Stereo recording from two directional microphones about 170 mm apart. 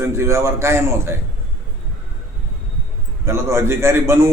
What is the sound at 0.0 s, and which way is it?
A man's voice, 15° right (ahead or behind).